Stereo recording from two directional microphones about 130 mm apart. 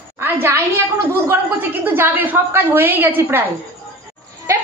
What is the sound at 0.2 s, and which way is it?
A woman's voice, 15° right (ahead or behind).